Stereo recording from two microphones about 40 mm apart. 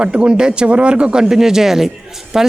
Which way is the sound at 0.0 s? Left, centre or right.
Right.